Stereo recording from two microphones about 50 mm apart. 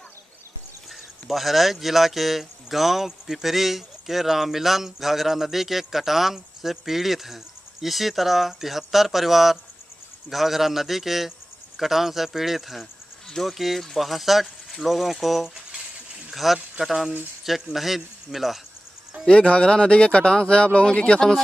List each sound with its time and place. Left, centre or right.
1.3 s speech: centre
16.3 s a sound: centre
16.8 s speech: centre
19.2 s speech: left